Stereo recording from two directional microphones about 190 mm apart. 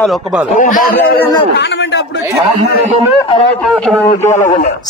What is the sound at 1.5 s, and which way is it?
Speech, 70° left (ahead or behind).